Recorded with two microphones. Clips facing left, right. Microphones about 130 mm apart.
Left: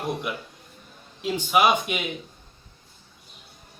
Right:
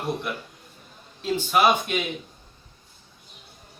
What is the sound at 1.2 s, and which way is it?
Speech, 15° left (ahead or behind).